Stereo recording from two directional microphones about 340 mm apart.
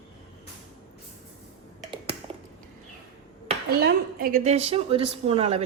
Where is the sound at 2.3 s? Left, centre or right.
Centre.